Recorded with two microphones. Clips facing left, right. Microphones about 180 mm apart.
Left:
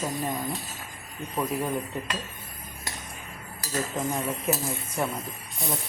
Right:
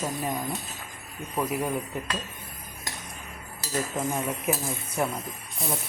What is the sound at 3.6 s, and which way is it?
Speech, 5° right (ahead or behind).